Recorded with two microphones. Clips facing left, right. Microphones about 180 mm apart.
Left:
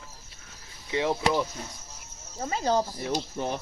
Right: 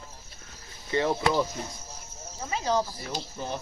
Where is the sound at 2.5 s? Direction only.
40° left (ahead or behind).